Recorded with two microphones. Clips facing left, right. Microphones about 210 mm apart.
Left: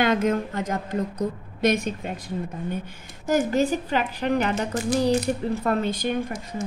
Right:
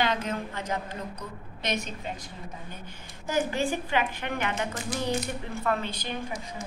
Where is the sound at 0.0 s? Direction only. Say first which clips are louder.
Left 7 dB; 45° left (ahead or behind).